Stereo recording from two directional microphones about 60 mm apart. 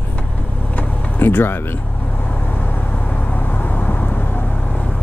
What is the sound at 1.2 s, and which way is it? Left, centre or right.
Speech, left.